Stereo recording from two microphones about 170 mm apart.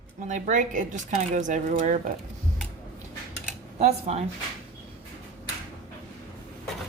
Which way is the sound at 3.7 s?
40° right (ahead or behind).